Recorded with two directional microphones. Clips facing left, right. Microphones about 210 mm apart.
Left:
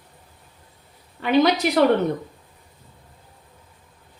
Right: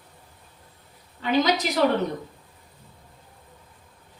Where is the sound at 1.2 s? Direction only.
65° left (ahead or behind).